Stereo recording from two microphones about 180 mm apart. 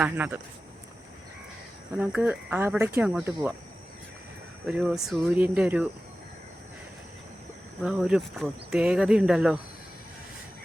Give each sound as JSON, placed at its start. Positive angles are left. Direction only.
{"t": 0.0, "sound": "speech", "side_deg": -10}
{"t": 2.0, "sound": "speech", "side_deg": -5}
{"t": 4.6, "sound": "speech", "side_deg": 0}
{"t": 7.8, "sound": "speech", "side_deg": -5}